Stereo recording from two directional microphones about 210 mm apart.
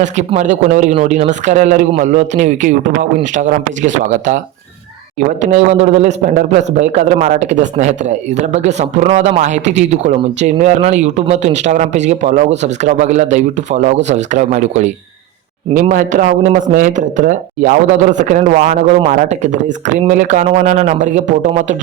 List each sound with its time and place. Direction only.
0.0 s speech: 35° right (ahead or behind)
5.4 s speech: 35° right (ahead or behind)